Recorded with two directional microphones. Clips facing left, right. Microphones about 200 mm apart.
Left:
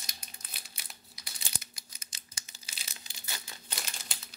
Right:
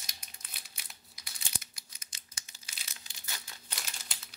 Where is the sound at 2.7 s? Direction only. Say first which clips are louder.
Left 3 dB; 30° left (ahead or behind).